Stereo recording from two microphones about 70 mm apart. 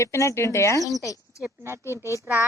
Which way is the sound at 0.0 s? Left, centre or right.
Left.